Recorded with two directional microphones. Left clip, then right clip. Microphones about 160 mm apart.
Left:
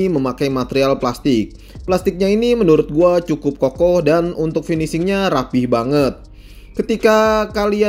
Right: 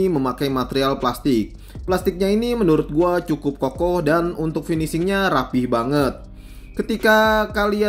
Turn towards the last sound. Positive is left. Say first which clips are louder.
# left 3 dB
turn(degrees=15)  # may be behind; listen again after turning